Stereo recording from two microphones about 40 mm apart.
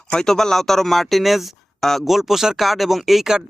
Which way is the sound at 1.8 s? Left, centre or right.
Centre.